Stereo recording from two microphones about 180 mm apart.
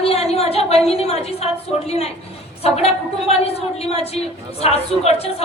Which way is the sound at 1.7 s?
35° left (ahead or behind).